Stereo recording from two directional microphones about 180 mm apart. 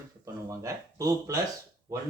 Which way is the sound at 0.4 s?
15° right (ahead or behind).